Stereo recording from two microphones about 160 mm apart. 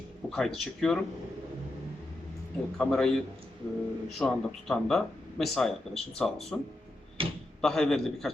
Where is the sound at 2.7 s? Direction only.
5° left (ahead or behind).